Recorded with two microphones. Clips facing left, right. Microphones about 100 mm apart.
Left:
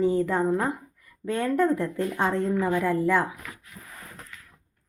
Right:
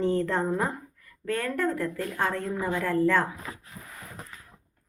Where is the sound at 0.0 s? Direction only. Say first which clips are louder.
Left 3 dB; 5° left (ahead or behind).